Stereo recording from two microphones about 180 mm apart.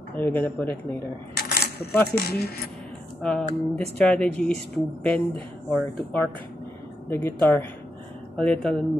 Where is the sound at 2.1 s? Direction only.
60° left (ahead or behind).